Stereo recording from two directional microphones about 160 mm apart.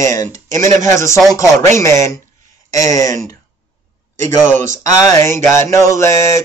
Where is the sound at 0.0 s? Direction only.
20° left (ahead or behind).